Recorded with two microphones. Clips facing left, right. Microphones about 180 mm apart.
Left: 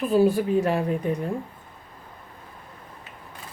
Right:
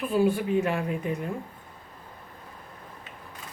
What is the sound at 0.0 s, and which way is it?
Speech, 40° left (ahead or behind).